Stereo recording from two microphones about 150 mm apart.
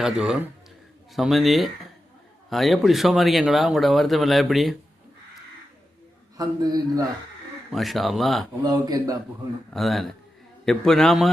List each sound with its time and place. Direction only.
0.0 s speech: 5° right (ahead or behind)
6.3 s a man's voice: 25° right (ahead or behind)
7.7 s speech: centre (ahead or behind)
8.6 s a man's voice: 25° right (ahead or behind)
9.7 s speech: centre (ahead or behind)